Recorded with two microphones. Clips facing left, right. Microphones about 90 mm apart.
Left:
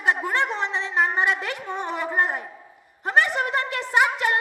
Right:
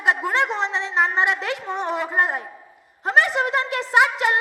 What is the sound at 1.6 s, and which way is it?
A woman's voice, 20° right (ahead or behind).